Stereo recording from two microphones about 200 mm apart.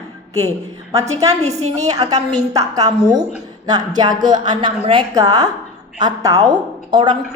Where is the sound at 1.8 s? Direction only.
20° right (ahead or behind).